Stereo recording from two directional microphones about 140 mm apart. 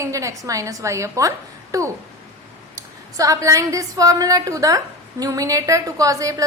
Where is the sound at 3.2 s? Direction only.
25° right (ahead or behind).